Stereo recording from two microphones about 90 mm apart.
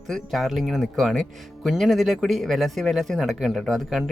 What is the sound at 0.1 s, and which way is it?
Speech, centre (ahead or behind).